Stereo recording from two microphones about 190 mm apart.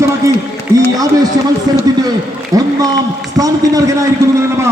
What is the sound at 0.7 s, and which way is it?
Speech, 20° right (ahead or behind).